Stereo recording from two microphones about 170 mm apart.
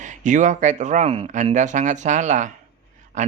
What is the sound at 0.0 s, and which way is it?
Speech, 45° right (ahead or behind).